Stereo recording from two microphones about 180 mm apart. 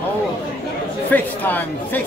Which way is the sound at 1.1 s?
10° left (ahead or behind).